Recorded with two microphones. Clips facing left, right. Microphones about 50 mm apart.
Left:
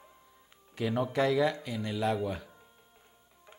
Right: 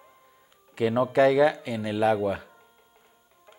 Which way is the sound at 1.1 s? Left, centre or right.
Right.